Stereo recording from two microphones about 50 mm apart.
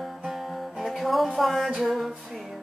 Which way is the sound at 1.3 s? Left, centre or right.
Centre.